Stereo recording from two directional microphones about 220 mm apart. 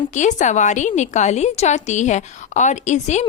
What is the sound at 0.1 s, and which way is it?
A woman's voice, 35° left (ahead or behind).